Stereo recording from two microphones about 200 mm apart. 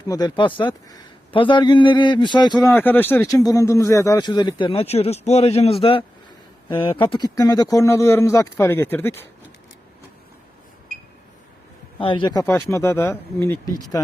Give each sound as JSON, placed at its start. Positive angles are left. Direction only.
{"t": 0.1, "sound": "speech", "side_deg": 20}
{"t": 11.9, "sound": "speech", "side_deg": 25}